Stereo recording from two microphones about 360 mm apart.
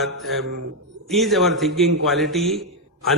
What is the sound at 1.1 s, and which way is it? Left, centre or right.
A man's voice, centre.